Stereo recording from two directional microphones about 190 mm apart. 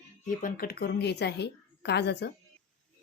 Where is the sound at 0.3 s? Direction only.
45° left (ahead or behind).